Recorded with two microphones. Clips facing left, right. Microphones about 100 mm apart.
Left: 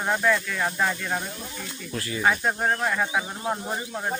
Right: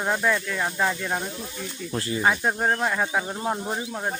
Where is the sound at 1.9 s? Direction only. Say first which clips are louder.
Right 3 dB; 30° right (ahead or behind).